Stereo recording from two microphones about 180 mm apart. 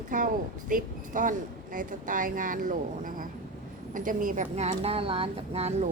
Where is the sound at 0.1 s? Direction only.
45° right (ahead or behind).